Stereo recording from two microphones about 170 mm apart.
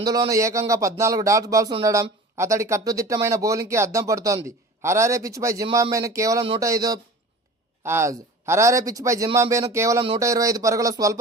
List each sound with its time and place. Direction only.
0.0 s a man's voice: 20° right (ahead or behind)